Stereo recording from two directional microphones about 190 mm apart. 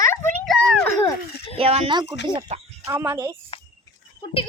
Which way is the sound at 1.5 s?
30° right (ahead or behind).